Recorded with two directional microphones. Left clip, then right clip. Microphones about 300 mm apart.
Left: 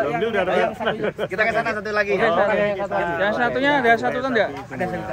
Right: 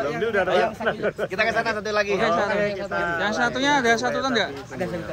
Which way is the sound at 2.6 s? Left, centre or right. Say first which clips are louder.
Left 3 dB; left.